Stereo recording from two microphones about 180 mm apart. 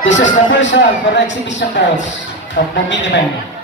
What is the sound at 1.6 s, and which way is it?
Speech, 65° left (ahead or behind).